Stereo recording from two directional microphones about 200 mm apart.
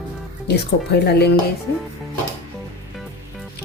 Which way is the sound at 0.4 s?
55° left (ahead or behind).